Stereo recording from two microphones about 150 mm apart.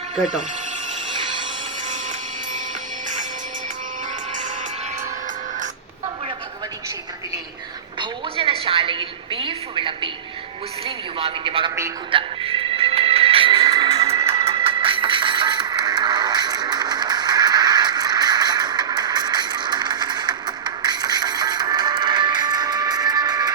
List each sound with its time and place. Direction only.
7.9 s a sound: 35° right (ahead or behind)
10.8 s a man's voice: 35° right (ahead or behind)
12.1 s music: 40° right (ahead or behind)